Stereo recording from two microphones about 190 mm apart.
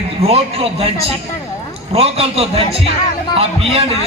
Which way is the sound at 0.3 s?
30° right (ahead or behind).